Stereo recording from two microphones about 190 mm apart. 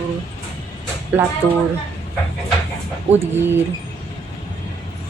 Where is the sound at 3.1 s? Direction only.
10° right (ahead or behind).